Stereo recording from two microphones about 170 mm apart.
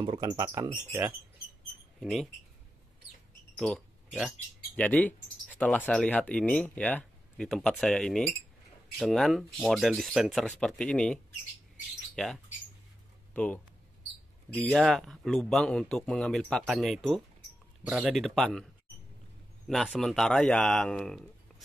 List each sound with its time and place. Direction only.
0.0 s speech: 25° right (ahead or behind)
2.0 s speech: centre (ahead or behind)
3.5 s a sound: 5° left (ahead or behind)
4.7 s speech: 10° left (ahead or behind)
12.2 s speech: centre (ahead or behind)
19.7 s speech: centre (ahead or behind)